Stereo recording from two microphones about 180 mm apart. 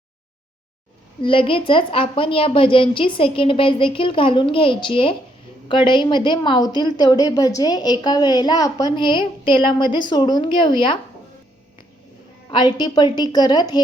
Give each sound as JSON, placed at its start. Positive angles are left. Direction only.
{"t": 1.2, "sound": "a woman's voice", "side_deg": 30}
{"t": 12.5, "sound": "a woman's voice", "side_deg": 25}